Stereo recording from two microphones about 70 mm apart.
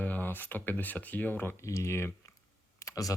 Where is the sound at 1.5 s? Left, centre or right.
Left.